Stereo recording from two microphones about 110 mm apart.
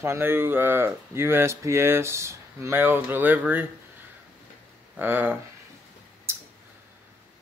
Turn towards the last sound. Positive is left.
turn(degrees=-25)  # may be behind; listen again after turning